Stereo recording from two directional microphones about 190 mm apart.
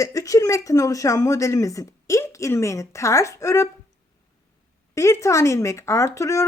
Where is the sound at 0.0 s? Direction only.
15° left (ahead or behind).